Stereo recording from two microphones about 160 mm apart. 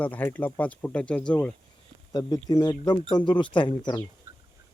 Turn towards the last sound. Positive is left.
turn(degrees=30)  # may be behind; listen again after turning